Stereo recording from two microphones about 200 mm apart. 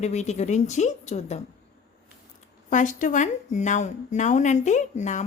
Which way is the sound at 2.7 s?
40° left (ahead or behind).